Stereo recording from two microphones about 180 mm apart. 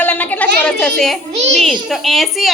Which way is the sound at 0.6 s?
5° left (ahead or behind).